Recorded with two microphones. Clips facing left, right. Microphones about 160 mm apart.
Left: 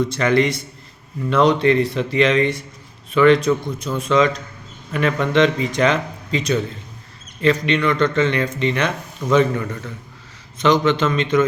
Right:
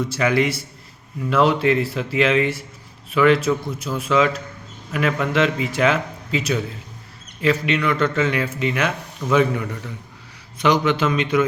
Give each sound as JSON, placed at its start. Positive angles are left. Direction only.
{"t": 0.0, "sound": "speech", "side_deg": -5}